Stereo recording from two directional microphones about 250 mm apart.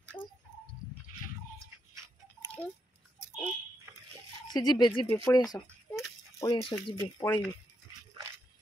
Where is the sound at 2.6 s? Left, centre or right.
Centre.